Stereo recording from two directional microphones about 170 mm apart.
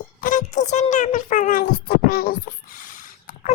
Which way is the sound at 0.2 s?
50° left (ahead or behind).